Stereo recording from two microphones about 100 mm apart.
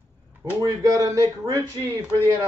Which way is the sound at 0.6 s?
35° right (ahead or behind).